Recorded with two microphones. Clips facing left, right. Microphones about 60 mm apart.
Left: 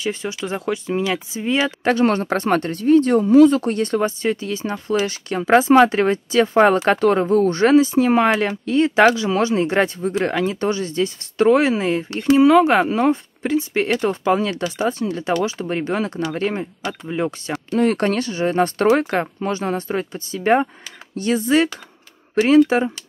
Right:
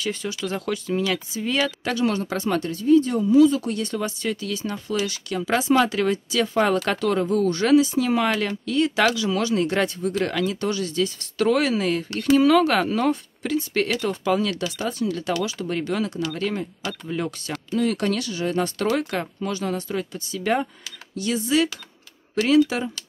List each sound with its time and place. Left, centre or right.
0.0 s speech: left
2.0 s speech: left
17.6 s speech: left